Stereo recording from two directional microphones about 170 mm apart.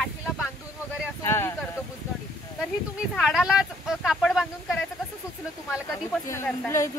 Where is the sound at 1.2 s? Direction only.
15° left (ahead or behind).